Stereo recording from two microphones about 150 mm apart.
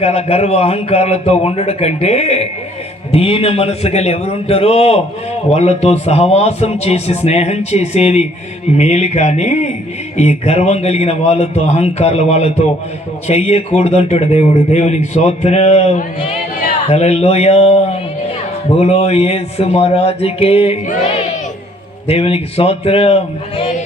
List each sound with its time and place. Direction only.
0.0 s a man's voice: 45° left (ahead or behind)
22.0 s a man's voice: 40° left (ahead or behind)